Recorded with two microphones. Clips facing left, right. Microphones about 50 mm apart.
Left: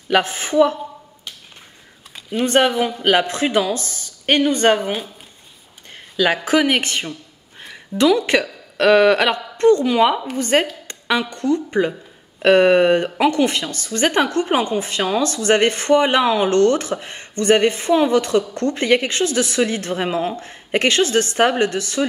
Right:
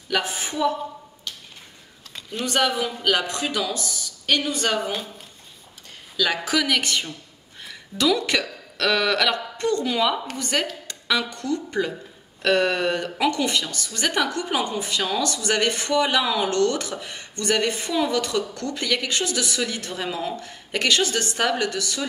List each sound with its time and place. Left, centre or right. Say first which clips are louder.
0.1 s speech: left 8 dB; left
2.4 s speech: left 6 dB; left
6.1 s speech: left 6 dB; left
7.6 s a sound: left 6 dB; left
8.3 s a woman's voice: left 6 dB; left